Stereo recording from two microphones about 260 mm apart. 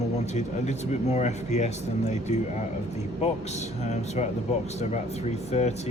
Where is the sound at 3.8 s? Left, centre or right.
Left.